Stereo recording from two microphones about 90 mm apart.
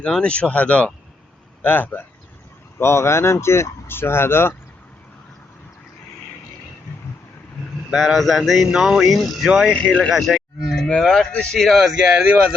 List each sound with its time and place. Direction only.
0.0 s speech: 10° left (ahead or behind)
7.9 s speech: centre (ahead or behind)
9.7 s speech: 5° left (ahead or behind); by 12.5 s 15° right (ahead or behind)